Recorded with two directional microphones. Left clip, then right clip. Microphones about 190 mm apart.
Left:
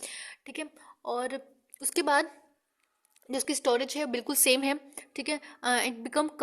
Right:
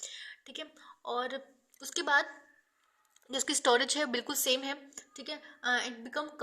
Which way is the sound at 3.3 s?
35° left (ahead or behind).